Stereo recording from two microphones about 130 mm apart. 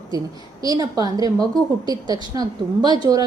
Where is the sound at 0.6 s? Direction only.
30° right (ahead or behind).